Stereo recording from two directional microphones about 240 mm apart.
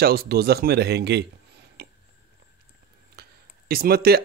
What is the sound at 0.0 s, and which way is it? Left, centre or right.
Speech, right.